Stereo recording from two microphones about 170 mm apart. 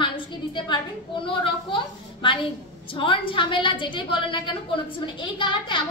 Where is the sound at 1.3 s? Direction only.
30° left (ahead or behind).